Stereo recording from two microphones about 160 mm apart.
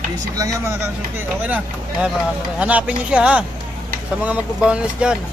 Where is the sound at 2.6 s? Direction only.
5° right (ahead or behind).